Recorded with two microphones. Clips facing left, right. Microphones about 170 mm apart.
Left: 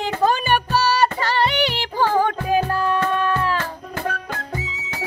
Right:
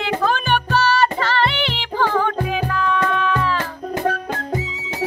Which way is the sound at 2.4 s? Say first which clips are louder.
Left 2 dB; 40° left (ahead or behind).